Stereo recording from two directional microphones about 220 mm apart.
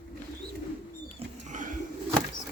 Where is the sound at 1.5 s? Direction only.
35° right (ahead or behind).